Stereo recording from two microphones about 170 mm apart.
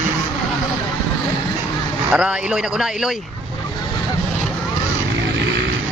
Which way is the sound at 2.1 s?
5° right (ahead or behind).